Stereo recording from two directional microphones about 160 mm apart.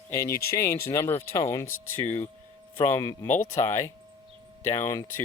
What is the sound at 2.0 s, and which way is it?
Speech, 45° left (ahead or behind).